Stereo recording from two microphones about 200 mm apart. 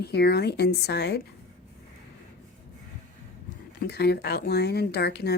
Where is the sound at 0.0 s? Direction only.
55° left (ahead or behind).